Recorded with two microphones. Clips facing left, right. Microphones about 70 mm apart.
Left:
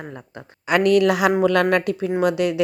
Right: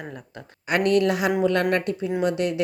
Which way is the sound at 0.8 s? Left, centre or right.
Left.